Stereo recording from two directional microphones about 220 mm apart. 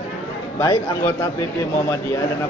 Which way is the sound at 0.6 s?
15° left (ahead or behind).